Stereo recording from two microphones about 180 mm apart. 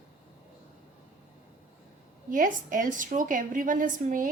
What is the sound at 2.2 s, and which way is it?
A woman's voice, 45° right (ahead or behind).